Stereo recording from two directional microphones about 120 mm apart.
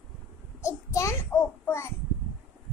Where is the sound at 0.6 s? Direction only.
25° left (ahead or behind).